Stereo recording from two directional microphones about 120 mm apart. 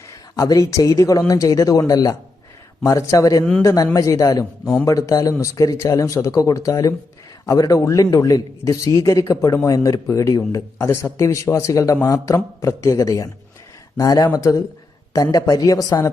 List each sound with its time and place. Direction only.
0.3 s a man's voice: 30° left (ahead or behind)
4.6 s a man's voice: 5° left (ahead or behind)
4.9 s a man's voice: 30° left (ahead or behind)